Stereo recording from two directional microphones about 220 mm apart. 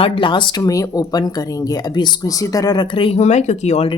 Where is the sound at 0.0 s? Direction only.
20° left (ahead or behind).